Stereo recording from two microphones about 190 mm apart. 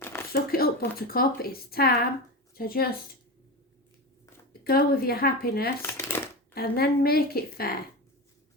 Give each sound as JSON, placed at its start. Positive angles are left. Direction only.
{"t": 0.5, "sound": "a sound", "side_deg": 50}
{"t": 0.9, "sound": "a woman's voice", "side_deg": 50}
{"t": 4.6, "sound": "a woman's voice", "side_deg": 50}
{"t": 5.8, "sound": "shuffling cards", "side_deg": 10}
{"t": 6.5, "sound": "a woman's voice", "side_deg": 55}